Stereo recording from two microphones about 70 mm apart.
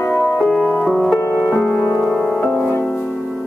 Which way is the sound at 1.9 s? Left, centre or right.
Centre.